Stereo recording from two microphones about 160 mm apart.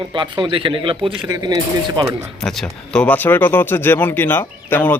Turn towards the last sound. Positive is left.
turn(degrees=10)  # may be behind; listen again after turning